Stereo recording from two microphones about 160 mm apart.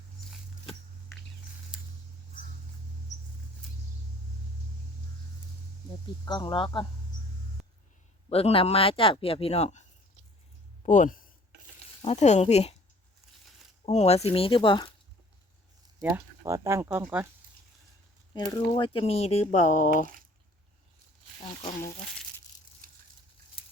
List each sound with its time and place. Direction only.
6.2 s speech: 25° left (ahead or behind)
8.3 s speech: 40° left (ahead or behind)
10.8 s a sound: 55° left (ahead or behind)
12.0 s speech: 45° left (ahead or behind)
13.8 s speech: 40° left (ahead or behind)
16.0 s speech: 15° right (ahead or behind)
18.5 s speech: 30° left (ahead or behind); by 20.1 s 50° left (ahead or behind)
22.8 s a sound: 60° right (ahead or behind)
23.6 s a sound: 35° left (ahead or behind)